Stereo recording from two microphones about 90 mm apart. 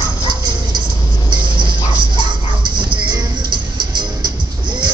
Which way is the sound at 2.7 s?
60° right (ahead or behind).